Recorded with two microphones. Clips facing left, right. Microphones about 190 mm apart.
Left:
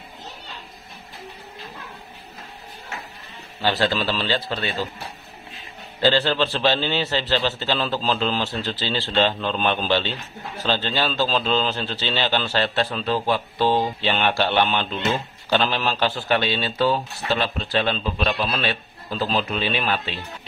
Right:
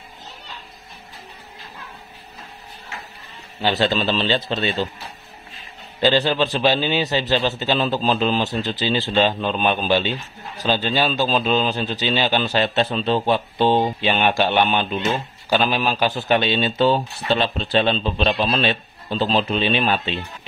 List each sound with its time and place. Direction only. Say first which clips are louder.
3.6 s a man's voice: right 2 dB; 20° right (ahead or behind)
5.9 s a man's voice: right 2 dB; 15° right (ahead or behind)